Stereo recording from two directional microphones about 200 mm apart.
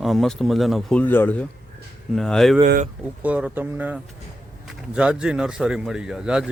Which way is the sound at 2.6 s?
40° right (ahead or behind).